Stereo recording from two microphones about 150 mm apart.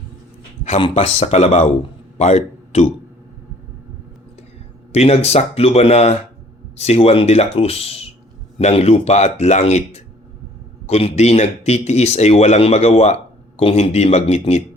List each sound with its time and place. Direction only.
0.8 s speech: 40° left (ahead or behind)
4.9 s speech: 45° left (ahead or behind)